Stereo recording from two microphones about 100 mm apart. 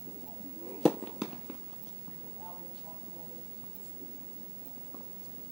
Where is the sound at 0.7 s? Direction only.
Centre (ahead or behind).